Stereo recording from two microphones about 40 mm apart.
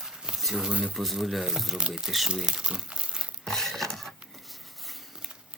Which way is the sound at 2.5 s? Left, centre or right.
Right.